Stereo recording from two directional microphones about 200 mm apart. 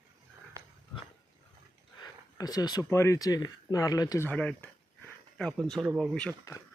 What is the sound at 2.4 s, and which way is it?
Speech, 20° left (ahead or behind).